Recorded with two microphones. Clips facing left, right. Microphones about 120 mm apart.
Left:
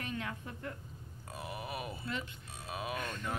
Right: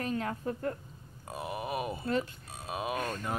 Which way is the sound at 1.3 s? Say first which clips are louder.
Right 6 dB; 20° right (ahead or behind).